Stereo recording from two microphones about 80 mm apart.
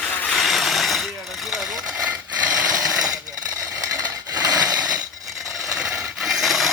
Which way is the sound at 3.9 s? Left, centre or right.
Right.